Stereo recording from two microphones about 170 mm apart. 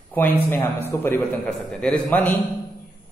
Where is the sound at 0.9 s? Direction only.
15° left (ahead or behind).